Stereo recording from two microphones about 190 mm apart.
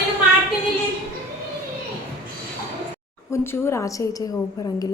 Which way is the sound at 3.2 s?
15° left (ahead or behind).